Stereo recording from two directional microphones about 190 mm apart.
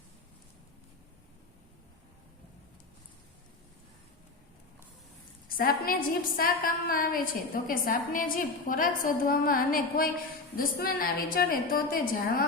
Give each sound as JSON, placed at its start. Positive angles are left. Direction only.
{"t": 5.5, "sound": "a woman's voice", "side_deg": 50}